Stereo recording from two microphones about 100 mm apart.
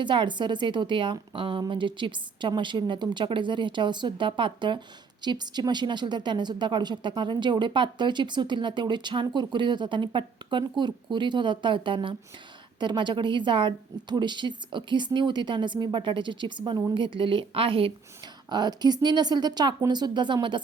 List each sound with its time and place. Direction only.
0.0 s a woman's voice: 55° right (ahead or behind)
18.4 s a woman's voice: 45° right (ahead or behind)